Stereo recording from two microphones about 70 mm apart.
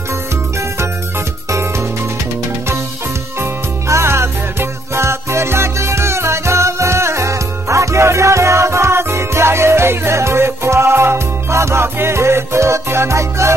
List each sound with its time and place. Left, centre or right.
1.5 s music: right
3.9 s music: right